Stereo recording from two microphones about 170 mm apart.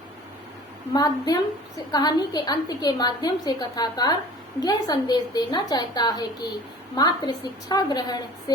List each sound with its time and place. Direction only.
0.9 s a woman's voice: 20° left (ahead or behind)